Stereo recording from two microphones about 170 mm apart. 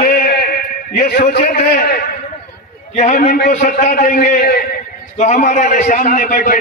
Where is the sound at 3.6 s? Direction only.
50° left (ahead or behind).